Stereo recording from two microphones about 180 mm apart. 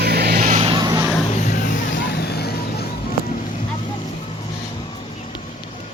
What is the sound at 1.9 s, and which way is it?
Vehicle, 70° left (ahead or behind).